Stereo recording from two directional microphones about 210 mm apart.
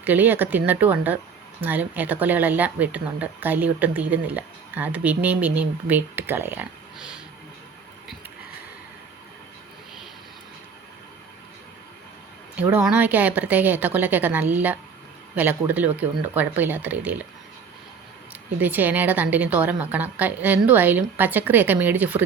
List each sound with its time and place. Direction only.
0.0 s speech: 10° right (ahead or behind)
12.5 s speech: 5° right (ahead or behind)
18.6 s speech: 10° right (ahead or behind)